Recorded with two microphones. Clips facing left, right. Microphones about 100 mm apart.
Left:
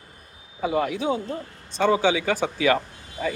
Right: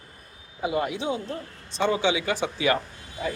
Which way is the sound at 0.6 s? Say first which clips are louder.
Left 3 dB; 45° left (ahead or behind).